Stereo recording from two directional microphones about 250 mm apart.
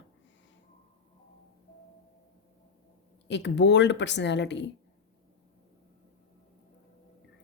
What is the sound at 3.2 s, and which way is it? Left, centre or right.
A woman's voice, left.